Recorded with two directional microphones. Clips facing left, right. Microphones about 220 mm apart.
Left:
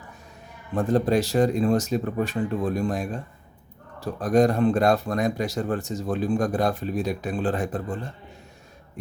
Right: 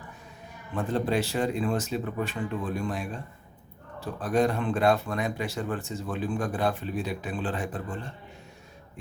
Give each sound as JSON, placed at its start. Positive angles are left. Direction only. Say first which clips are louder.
{"t": 0.7, "sound": "speech", "louder": "left 6 dB", "side_deg": 40}